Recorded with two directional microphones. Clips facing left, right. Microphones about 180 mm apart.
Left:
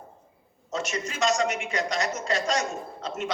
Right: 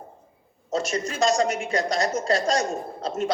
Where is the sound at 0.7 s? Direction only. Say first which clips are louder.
Right 5 dB; 35° right (ahead or behind).